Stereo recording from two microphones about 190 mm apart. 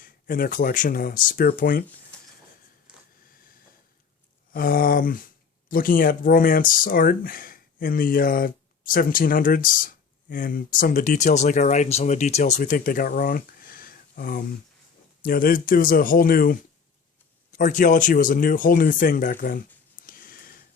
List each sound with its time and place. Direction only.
0.0 s speech: 45° left (ahead or behind)
4.5 s speech: 50° left (ahead or behind)
20.1 s a sound: 50° left (ahead or behind)